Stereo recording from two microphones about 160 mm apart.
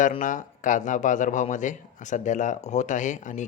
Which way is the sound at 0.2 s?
55° left (ahead or behind).